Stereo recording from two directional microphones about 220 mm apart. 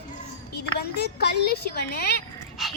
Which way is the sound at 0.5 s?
45° left (ahead or behind).